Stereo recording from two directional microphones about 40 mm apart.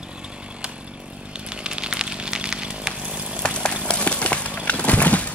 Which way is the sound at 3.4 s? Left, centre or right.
Left.